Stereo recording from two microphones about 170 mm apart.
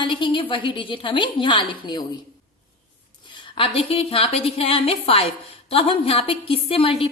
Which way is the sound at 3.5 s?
35° left (ahead or behind).